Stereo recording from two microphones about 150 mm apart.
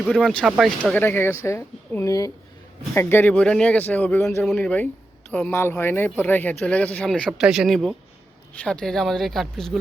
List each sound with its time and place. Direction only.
0.1 s speech: centre (ahead or behind)
0.9 s speech: 15° left (ahead or behind)